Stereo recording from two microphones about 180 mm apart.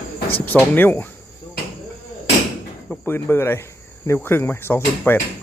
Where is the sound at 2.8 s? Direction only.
10° left (ahead or behind).